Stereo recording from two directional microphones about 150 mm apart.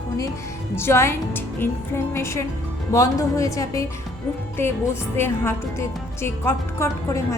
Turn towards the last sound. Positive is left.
turn(degrees=20)  # may be behind; listen again after turning